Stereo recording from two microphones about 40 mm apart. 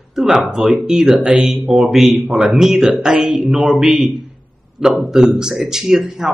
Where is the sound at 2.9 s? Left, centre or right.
Right.